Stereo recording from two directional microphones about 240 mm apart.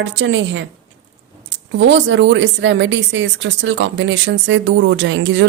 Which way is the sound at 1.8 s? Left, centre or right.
Right.